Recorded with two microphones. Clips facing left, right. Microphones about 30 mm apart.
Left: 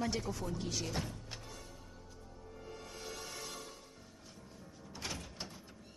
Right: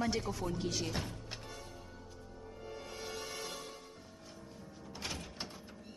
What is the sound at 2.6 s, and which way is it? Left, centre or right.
Music, centre.